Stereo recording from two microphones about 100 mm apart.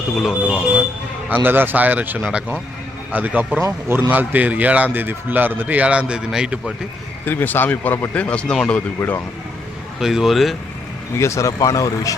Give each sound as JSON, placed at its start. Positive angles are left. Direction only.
{"t": 0.2, "sound": "a man's voice", "side_deg": -5}
{"t": 1.3, "sound": "a man's voice", "side_deg": -20}
{"t": 7.3, "sound": "speech", "side_deg": 20}
{"t": 10.0, "sound": "speech", "side_deg": -5}
{"t": 11.2, "sound": "speech", "side_deg": 30}